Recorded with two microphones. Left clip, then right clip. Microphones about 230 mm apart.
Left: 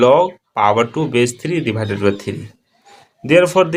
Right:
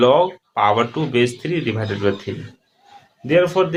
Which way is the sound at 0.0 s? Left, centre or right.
Left.